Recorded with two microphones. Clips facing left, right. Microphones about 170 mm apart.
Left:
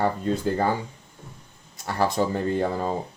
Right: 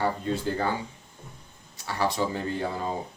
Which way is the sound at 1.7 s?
50° left (ahead or behind).